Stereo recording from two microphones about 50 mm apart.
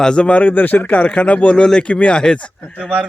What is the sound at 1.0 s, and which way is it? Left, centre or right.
Speech, left.